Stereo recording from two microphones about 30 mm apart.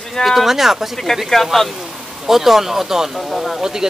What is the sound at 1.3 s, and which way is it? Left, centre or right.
Speech, centre.